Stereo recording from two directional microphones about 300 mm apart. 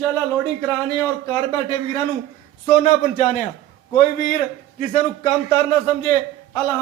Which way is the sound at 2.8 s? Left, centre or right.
Left.